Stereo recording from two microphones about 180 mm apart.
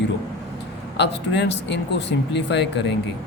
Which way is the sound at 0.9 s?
75° left (ahead or behind).